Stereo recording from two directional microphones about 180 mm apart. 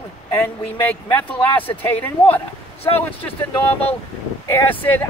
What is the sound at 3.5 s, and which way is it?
Speech, 10° left (ahead or behind).